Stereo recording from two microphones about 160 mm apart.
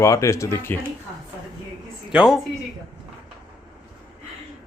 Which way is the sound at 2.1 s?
5° right (ahead or behind).